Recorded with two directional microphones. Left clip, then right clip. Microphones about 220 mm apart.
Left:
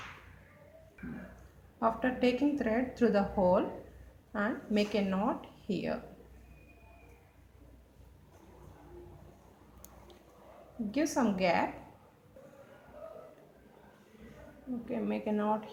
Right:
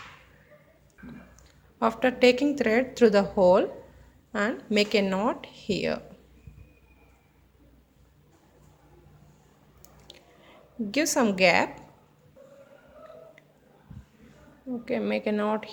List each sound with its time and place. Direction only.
1.8 s speech: 50° right (ahead or behind)
10.9 s speech: 50° right (ahead or behind)
14.8 s speech: 45° right (ahead or behind)